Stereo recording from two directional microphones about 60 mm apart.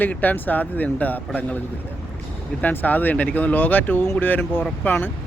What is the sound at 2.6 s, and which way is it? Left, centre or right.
Speech, left.